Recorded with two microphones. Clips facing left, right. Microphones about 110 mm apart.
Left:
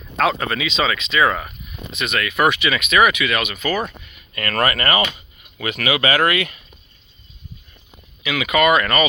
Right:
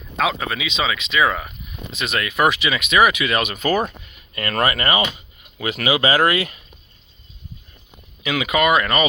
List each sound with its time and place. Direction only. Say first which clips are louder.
0.2 s speech: left 2 dB; 5° right (ahead or behind)
2.0 s speech: even; 25° right (ahead or behind)
3.8 s speech: right 1 dB; 25° right (ahead or behind)
8.3 s speech: left 1 dB; 25° right (ahead or behind)